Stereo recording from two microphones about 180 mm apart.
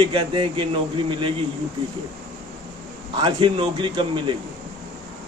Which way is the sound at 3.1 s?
25° right (ahead or behind).